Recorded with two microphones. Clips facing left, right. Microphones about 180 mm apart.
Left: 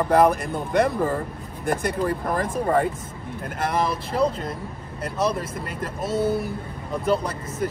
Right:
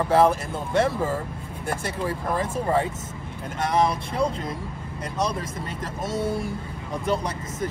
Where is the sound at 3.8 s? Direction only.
5° left (ahead or behind).